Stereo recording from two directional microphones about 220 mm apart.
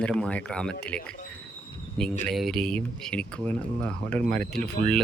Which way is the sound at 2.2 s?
Centre (ahead or behind).